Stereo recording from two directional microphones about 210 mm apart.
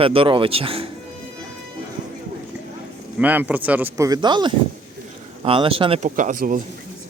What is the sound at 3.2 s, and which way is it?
Speech, 5° right (ahead or behind).